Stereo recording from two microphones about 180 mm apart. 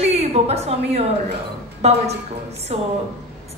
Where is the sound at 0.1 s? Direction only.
35° right (ahead or behind).